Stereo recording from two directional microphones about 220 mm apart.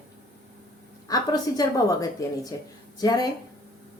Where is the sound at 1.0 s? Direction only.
15° left (ahead or behind).